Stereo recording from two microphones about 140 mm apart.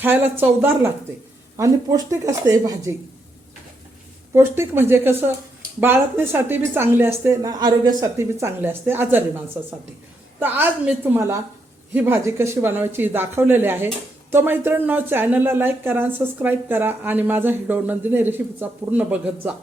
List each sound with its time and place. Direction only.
0.0 s speech: 15° right (ahead or behind)
4.4 s speech: 15° right (ahead or behind)
7.5 s speech: 30° right (ahead or behind); by 9.2 s 15° right (ahead or behind)
10.4 s speech: 15° right (ahead or behind)